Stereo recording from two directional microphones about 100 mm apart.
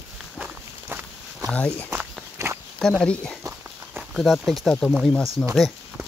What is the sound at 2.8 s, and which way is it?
Speech, 5° left (ahead or behind).